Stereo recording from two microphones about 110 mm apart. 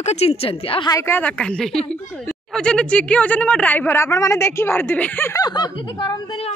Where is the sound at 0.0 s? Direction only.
75° left (ahead or behind); by 0.8 s 55° left (ahead or behind).